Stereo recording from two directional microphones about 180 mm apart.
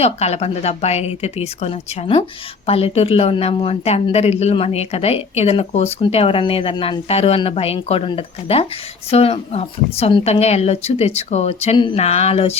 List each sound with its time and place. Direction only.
0.0 s a woman's voice: 35° left (ahead or behind)